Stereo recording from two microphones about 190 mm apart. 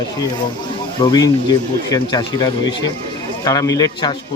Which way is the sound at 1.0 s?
20° left (ahead or behind).